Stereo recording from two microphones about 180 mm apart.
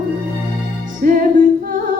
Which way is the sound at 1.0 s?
50° right (ahead or behind).